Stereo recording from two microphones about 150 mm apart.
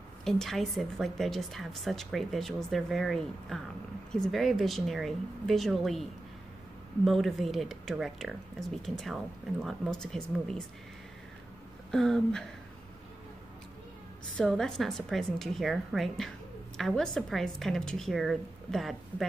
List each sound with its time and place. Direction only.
0.2 s speech: 5° left (ahead or behind)
7.1 s speech: centre (ahead or behind)
11.9 s speech: 5° left (ahead or behind)
14.3 s speech: 5° left (ahead or behind)